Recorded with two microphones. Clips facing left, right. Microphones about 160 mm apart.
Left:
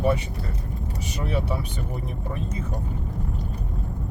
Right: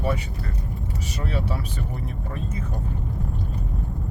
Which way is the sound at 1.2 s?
20° left (ahead or behind).